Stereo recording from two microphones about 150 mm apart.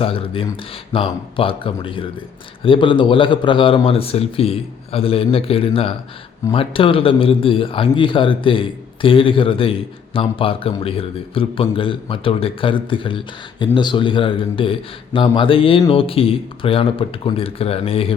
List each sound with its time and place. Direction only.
0.0 s a man's voice: 40° left (ahead or behind)